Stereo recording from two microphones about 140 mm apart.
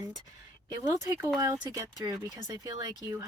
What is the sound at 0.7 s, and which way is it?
A woman's voice, 25° right (ahead or behind).